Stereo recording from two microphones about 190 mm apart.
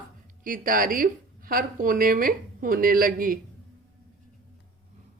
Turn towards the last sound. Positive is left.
turn(degrees=-50)  # may be behind; listen again after turning